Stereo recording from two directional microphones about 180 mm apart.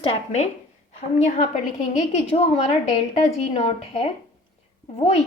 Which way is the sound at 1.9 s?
35° left (ahead or behind).